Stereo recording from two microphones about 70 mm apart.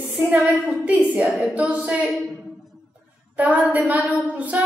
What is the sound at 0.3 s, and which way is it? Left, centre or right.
A woman's voice, centre.